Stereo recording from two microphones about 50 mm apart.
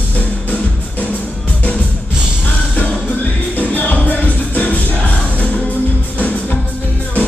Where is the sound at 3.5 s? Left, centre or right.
Left.